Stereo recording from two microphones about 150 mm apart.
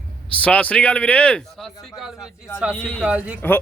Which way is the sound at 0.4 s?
10° left (ahead or behind).